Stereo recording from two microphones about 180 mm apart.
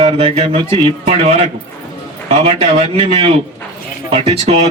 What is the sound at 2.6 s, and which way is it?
A man's voice, 35° right (ahead or behind).